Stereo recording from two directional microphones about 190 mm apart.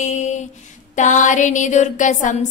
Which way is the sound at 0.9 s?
40° left (ahead or behind).